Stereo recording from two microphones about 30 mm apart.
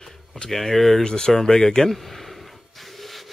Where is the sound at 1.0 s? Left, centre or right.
Left.